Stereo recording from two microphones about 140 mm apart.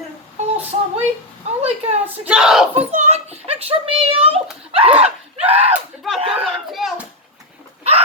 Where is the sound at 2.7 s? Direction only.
50° right (ahead or behind).